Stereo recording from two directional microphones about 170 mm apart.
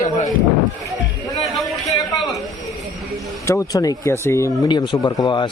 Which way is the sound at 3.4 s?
15° left (ahead or behind).